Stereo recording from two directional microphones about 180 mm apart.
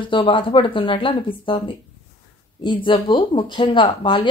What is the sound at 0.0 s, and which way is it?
Speech, 30° left (ahead or behind).